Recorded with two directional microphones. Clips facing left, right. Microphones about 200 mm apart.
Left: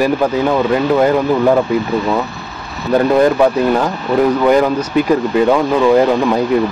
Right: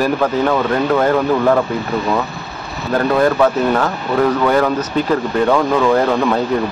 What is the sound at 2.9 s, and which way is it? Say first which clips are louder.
Speech: left 3 dB; 15° left (ahead or behind).